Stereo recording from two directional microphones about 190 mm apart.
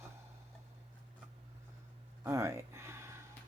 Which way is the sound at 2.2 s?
15° right (ahead or behind).